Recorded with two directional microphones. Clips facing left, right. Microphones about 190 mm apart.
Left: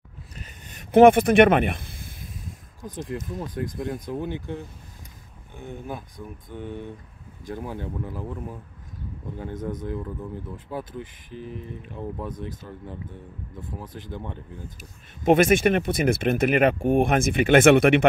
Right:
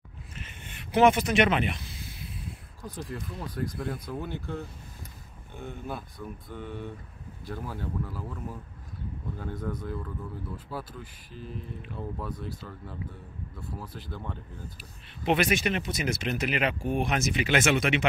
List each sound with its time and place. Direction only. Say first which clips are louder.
0.4 s a sound: even; 40° left (ahead or behind)
3.3 s speech: even; 20° left (ahead or behind)
9.4 s speech: left 4 dB; 20° left (ahead or behind)
14.8 s speech: left 2 dB; 45° left (ahead or behind)